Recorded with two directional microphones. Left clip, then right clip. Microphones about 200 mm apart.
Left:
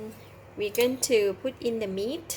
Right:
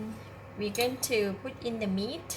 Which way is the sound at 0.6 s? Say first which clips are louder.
Left 5 dB; 45° left (ahead or behind).